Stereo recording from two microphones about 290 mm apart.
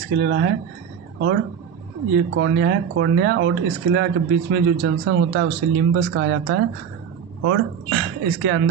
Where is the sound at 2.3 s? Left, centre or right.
Right.